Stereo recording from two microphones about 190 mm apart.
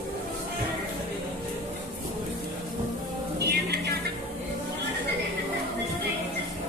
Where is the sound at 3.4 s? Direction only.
60° right (ahead or behind).